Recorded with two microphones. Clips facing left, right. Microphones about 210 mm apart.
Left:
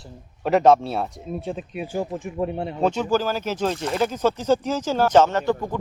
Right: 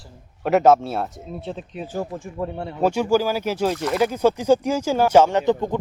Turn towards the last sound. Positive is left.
turn(degrees=-20)  # may be behind; listen again after turning